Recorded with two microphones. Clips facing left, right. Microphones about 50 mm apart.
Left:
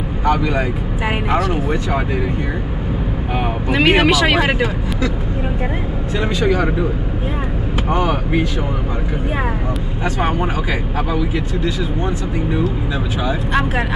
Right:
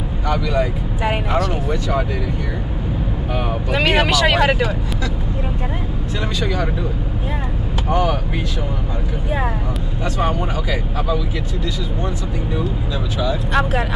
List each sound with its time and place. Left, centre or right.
0.2 s vehicle: left
3.7 s speech: centre
6.4 s speech: left
7.9 s speech: left
10.0 s speech: left
13.5 s speech: centre